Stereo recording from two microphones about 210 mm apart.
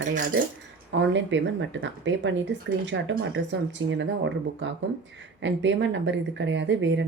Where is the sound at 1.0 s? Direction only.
60° right (ahead or behind).